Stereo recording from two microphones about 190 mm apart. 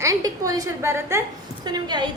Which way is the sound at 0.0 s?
20° right (ahead or behind).